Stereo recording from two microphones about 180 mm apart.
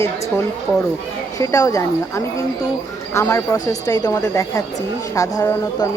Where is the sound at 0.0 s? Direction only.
15° left (ahead or behind).